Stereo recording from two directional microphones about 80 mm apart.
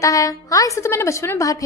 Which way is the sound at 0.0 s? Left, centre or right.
Left.